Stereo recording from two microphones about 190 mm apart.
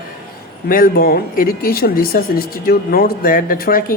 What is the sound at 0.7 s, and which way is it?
Speech, 50° left (ahead or behind).